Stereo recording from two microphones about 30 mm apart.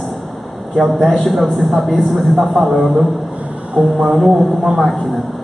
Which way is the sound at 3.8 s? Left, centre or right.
Centre.